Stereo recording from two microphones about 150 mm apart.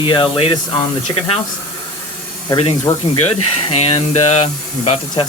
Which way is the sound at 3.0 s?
40° left (ahead or behind).